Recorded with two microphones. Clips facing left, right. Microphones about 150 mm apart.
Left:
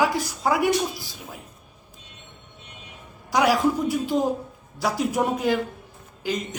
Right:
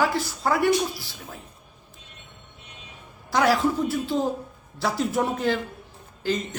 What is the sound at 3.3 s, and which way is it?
A man's voice, 10° left (ahead or behind).